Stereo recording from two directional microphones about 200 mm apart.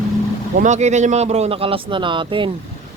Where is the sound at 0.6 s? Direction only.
35° right (ahead or behind).